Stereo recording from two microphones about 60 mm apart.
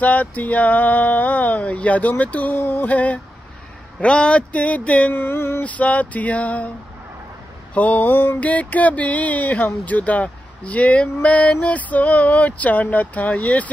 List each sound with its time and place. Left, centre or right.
0.0 s speech: left
2.9 s speech: left
5.1 s a sound: left
5.6 s speech: left
7.7 s a sound: left
8.4 s speech: left